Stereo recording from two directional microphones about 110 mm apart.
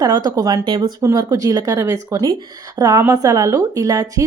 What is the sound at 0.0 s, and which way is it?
Speech, 35° right (ahead or behind).